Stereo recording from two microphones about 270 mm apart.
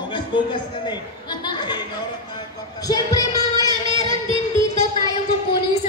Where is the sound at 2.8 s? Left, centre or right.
Centre.